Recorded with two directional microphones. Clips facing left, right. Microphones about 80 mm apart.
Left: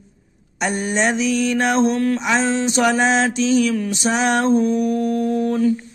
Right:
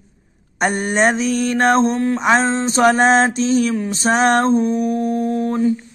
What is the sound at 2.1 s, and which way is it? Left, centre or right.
Speech, right.